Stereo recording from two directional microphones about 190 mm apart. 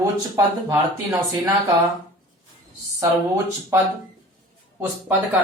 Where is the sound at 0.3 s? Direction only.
15° right (ahead or behind).